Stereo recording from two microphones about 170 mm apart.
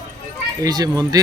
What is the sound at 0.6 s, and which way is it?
Speech, 20° right (ahead or behind).